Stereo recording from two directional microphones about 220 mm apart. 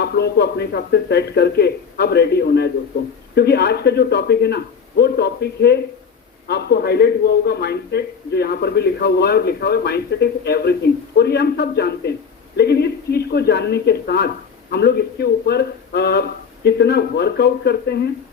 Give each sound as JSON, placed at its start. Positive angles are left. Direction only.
{"t": 0.0, "sound": "a man's voice", "side_deg": 50}